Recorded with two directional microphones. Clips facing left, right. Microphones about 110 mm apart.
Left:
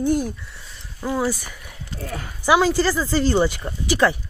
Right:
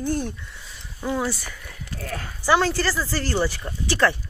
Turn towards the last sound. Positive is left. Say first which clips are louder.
# left 2 dB
turn(degrees=15)  # may be behind; listen again after turning